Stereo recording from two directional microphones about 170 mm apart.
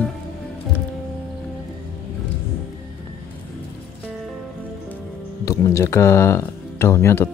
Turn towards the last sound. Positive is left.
turn(degrees=15)  # may be behind; listen again after turning